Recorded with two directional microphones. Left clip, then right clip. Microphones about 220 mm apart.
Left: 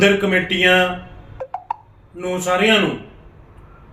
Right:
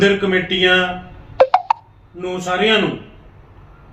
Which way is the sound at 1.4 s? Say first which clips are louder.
Right 14 dB; 45° right (ahead or behind).